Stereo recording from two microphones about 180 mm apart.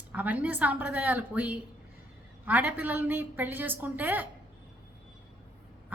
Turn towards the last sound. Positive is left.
turn(degrees=-10)  # may be behind; listen again after turning